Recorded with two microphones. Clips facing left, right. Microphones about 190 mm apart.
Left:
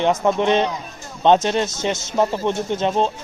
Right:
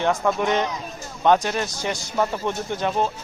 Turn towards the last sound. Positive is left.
turn(degrees=20)  # may be behind; listen again after turning